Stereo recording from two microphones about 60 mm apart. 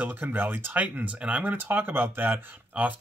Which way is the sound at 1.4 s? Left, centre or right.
Right.